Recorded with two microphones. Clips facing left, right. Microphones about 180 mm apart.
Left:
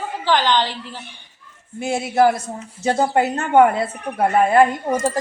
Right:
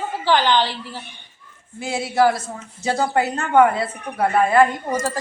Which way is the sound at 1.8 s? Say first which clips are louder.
Left 3 dB; 50° left (ahead or behind).